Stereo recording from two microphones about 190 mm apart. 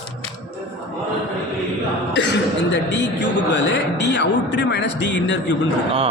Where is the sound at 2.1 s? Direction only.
65° left (ahead or behind).